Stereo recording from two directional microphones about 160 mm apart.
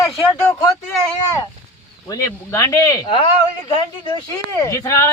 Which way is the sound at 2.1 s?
20° left (ahead or behind).